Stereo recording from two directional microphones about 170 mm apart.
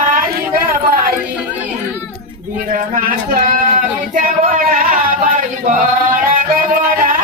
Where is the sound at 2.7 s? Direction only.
50° right (ahead or behind).